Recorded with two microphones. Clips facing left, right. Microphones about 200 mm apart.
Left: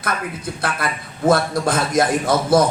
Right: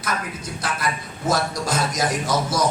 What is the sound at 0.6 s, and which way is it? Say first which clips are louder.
A man's voice: left 2 dB; 60° left (ahead or behind).